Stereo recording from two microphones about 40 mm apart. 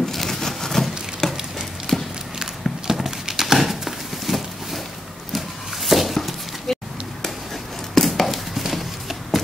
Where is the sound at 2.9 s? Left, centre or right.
Centre.